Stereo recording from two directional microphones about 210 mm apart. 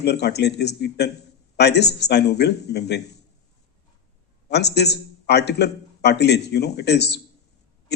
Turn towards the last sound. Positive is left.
turn(degrees=50)  # may be behind; listen again after turning